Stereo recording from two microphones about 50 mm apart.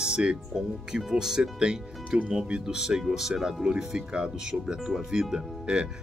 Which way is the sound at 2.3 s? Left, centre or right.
Centre.